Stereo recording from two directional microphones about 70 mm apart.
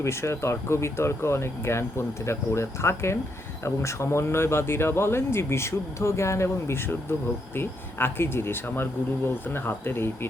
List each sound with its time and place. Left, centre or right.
0.0 s speech: left